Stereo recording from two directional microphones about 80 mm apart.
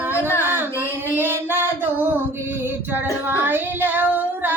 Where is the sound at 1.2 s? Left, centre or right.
Right.